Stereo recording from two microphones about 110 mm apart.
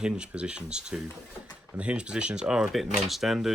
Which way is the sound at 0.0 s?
10° right (ahead or behind).